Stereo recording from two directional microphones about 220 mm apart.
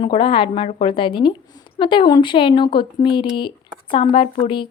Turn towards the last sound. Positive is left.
turn(degrees=20)  # may be behind; listen again after turning